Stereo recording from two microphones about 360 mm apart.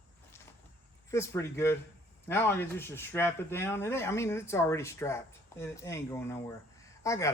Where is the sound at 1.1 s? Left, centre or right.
Centre.